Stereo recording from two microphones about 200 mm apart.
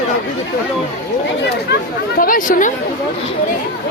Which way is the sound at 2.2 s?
45° left (ahead or behind).